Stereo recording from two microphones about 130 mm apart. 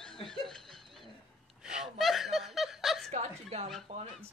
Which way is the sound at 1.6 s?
5° right (ahead or behind).